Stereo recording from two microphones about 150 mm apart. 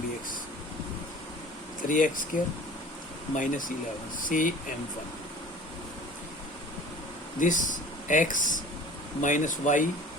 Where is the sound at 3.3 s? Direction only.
60° left (ahead or behind).